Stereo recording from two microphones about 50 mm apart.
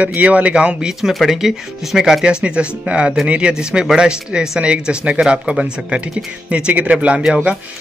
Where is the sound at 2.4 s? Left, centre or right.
Right.